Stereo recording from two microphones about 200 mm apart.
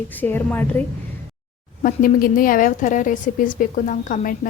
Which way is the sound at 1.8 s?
45° left (ahead or behind).